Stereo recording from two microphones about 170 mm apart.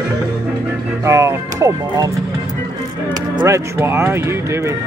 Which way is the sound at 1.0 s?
15° right (ahead or behind).